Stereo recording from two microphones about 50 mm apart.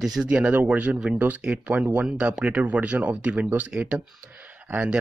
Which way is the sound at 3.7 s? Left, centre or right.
Right.